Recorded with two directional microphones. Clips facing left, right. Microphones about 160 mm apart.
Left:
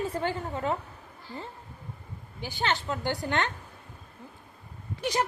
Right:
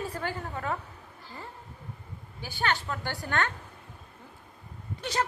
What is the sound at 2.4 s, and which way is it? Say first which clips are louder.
A woman's voice: left 1 dB; 20° left (ahead or behind).